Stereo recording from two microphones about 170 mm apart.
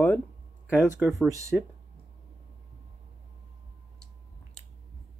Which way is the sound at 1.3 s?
20° right (ahead or behind).